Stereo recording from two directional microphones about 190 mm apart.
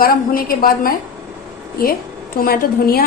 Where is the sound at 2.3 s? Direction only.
50° left (ahead or behind).